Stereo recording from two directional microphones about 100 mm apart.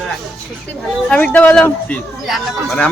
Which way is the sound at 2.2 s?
Centre (ahead or behind).